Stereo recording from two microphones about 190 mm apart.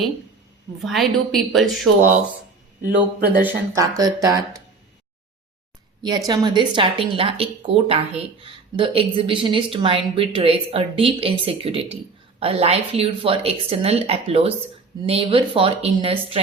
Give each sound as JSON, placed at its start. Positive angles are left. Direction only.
{"t": 0.8, "sound": "a woman's voice", "side_deg": 0}
{"t": 2.8, "sound": "speech", "side_deg": -50}
{"t": 3.8, "sound": "a woman's voice", "side_deg": -20}
{"t": 6.0, "sound": "a woman's voice", "side_deg": -20}